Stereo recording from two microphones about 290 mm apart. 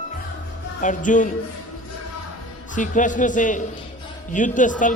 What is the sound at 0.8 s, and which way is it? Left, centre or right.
Speech, left.